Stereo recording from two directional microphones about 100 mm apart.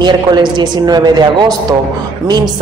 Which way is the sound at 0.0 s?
50° right (ahead or behind).